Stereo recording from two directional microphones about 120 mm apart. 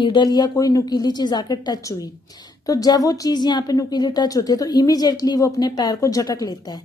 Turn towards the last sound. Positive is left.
turn(degrees=30)  # may be behind; listen again after turning